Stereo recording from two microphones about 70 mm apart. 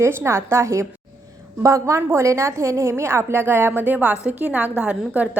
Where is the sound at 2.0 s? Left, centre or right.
Right.